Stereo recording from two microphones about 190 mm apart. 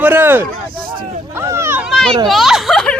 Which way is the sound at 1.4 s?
15° right (ahead or behind).